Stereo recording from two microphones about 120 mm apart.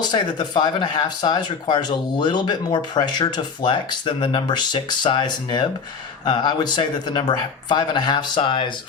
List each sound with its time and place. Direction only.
0.0 s speech: 35° left (ahead or behind)